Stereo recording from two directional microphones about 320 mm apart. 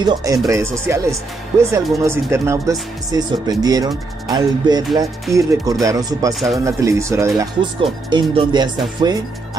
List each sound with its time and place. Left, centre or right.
0.0 s speech: centre